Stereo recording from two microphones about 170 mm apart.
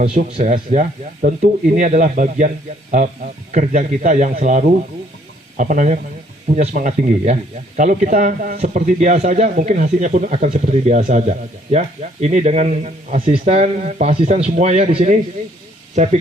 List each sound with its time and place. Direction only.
0.3 s speech: 35° right (ahead or behind)
0.5 s speech: 50° right (ahead or behind)
3.5 s speech: 45° right (ahead or behind)